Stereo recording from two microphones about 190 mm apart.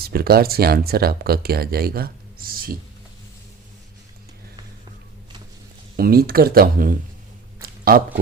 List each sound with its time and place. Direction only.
0.0 s speech: 55° right (ahead or behind)
6.0 s speech: 50° right (ahead or behind)
7.6 s a sound: 50° right (ahead or behind)